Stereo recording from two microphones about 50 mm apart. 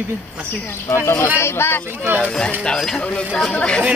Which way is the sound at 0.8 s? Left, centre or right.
Left.